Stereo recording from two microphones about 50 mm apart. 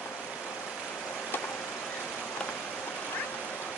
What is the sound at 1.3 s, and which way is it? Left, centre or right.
Vehicle, left.